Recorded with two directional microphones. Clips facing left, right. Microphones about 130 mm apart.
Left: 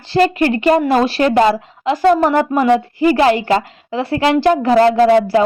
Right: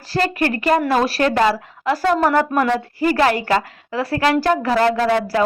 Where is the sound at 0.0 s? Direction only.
25° left (ahead or behind).